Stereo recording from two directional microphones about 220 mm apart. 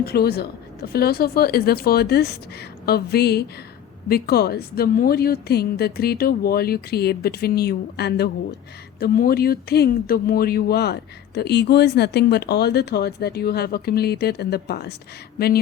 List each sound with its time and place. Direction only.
0.0 s speech: 45° left (ahead or behind)